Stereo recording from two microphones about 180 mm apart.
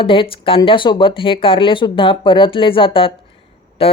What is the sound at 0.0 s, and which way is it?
Speech, 30° left (ahead or behind).